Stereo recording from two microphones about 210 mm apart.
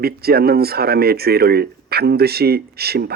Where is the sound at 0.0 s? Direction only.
50° right (ahead or behind).